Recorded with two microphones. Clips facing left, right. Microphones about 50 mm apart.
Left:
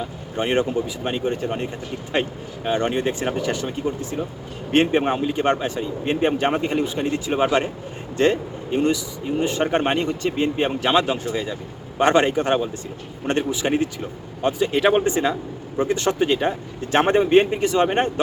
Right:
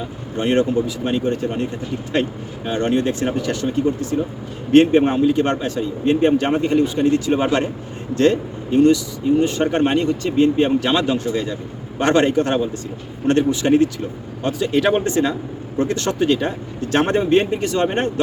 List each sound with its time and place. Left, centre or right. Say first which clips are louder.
0.3 s speech: right 3 dB; centre